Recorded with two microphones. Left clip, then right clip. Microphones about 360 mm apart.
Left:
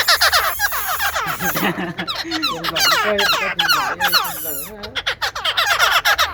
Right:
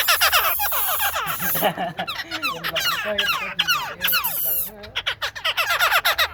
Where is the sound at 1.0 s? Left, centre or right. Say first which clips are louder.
Left 4 dB; centre.